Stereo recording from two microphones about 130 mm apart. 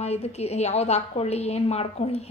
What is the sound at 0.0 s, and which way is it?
A woman's voice, 55° left (ahead or behind).